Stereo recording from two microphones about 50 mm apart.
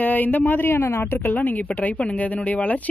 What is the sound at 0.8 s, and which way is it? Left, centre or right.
Speech, left.